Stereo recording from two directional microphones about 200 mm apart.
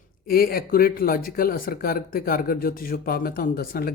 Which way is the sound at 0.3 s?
45° left (ahead or behind).